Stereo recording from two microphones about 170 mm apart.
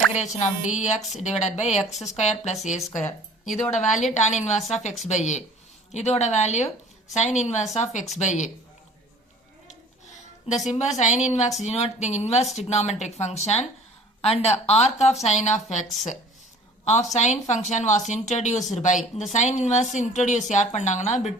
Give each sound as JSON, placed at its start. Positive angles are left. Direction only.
{"t": 0.2, "sound": "a woman's voice", "side_deg": 45}
{"t": 3.4, "sound": "speech", "side_deg": 0}
{"t": 3.8, "sound": "a woman's voice", "side_deg": 45}
{"t": 10.7, "sound": "a woman's voice", "side_deg": 40}